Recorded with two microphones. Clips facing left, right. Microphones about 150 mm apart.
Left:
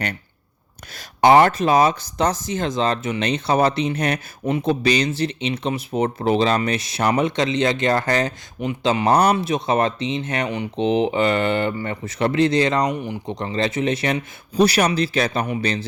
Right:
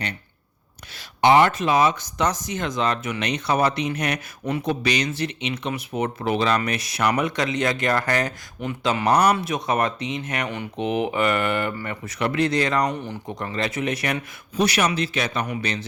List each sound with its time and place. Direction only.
0.9 s speech: 40° left (ahead or behind)